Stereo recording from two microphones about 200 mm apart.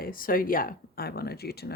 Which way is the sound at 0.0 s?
45° left (ahead or behind).